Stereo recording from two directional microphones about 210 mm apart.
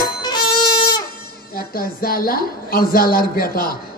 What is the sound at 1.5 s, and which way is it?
A woman's voice, 45° left (ahead or behind).